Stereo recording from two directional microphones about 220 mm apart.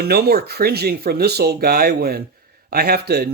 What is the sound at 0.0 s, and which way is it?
Speech, 45° right (ahead or behind).